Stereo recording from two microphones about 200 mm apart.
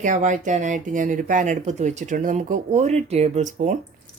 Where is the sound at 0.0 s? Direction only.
40° right (ahead or behind).